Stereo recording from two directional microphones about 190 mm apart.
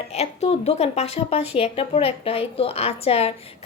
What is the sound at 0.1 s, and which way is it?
A woman's voice, 35° left (ahead or behind).